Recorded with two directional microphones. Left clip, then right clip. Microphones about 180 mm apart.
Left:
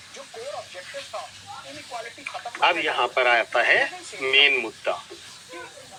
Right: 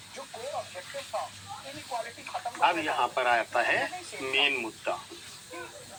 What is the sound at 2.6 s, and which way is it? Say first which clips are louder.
Speech: left 5 dB; 35° left (ahead or behind).